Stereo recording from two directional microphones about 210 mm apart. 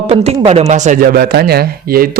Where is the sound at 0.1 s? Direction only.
25° right (ahead or behind).